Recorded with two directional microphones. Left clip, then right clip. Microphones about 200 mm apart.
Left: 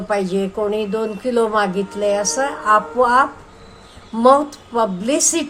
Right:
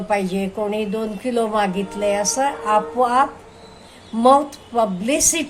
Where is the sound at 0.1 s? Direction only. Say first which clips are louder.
Left 2 dB; 10° left (ahead or behind).